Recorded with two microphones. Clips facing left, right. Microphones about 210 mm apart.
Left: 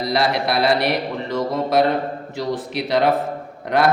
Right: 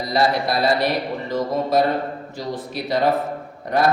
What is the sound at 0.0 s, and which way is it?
Speech, 70° left (ahead or behind).